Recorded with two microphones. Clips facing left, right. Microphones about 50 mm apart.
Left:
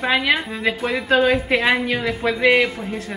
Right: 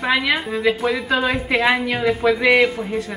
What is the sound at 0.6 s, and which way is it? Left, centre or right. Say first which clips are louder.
A woman's voice: right 4 dB; centre.